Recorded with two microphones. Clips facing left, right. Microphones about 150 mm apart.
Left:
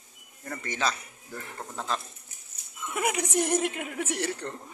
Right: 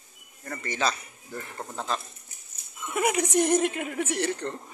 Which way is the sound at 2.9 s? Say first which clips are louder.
Right 4 dB; 5° left (ahead or behind).